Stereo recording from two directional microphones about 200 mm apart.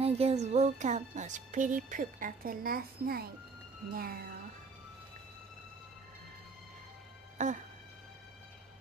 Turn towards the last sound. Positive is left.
turn(degrees=-40)  # may be behind; listen again after turning